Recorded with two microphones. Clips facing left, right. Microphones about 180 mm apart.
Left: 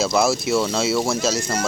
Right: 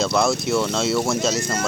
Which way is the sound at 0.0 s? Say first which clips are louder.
Left 1 dB; 5° left (ahead or behind).